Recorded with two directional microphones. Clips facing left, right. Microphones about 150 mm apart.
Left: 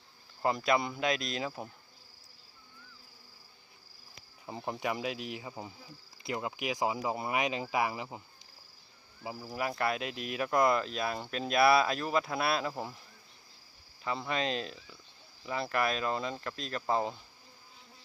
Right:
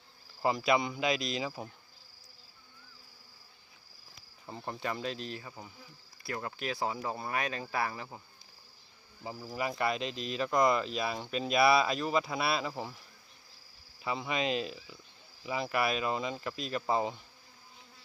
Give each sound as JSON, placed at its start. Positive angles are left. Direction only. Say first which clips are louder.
{"t": 0.4, "sound": "speech", "louder": "right 1 dB", "side_deg": 0}
{"t": 4.4, "sound": "speech", "louder": "left 2 dB", "side_deg": 10}
{"t": 9.2, "sound": "speech", "louder": "even", "side_deg": 10}
{"t": 14.0, "sound": "speech", "louder": "even", "side_deg": -5}